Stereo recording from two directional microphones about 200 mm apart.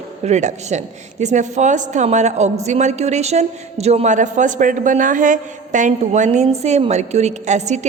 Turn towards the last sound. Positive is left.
turn(degrees=-35)  # may be behind; listen again after turning